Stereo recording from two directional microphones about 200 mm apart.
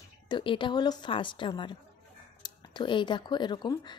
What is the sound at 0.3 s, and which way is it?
Speech, 25° left (ahead or behind).